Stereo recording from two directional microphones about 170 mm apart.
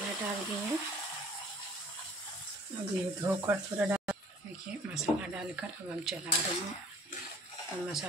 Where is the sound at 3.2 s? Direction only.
15° right (ahead or behind).